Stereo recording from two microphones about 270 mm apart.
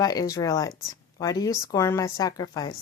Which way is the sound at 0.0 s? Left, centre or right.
Centre.